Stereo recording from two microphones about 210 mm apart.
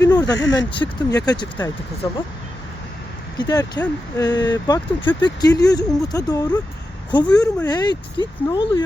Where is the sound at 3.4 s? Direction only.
20° left (ahead or behind).